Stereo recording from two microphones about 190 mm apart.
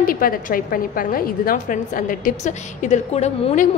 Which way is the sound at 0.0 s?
50° left (ahead or behind).